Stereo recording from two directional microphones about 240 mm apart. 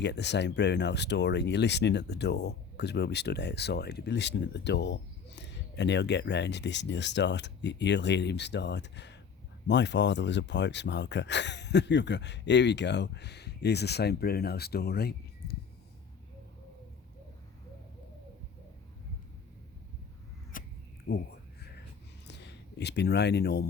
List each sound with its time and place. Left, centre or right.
0.0 s speech: left
20.5 s a sound: left
21.1 s speech: left
22.3 s speech: left